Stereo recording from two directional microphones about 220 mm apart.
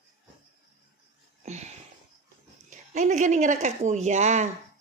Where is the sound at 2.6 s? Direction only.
35° right (ahead or behind).